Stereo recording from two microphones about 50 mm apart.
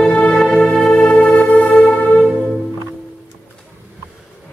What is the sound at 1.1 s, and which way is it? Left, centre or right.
Music, left.